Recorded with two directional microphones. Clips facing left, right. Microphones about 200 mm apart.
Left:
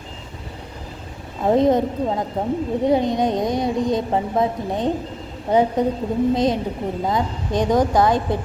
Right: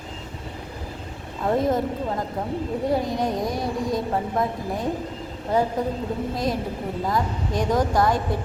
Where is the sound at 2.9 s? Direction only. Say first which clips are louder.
Left 5 dB; 20° left (ahead or behind).